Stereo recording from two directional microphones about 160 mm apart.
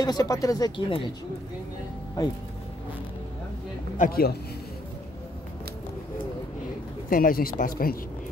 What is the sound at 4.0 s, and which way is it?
Speech, 70° left (ahead or behind).